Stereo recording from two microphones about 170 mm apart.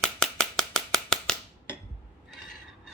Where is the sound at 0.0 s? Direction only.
5° left (ahead or behind).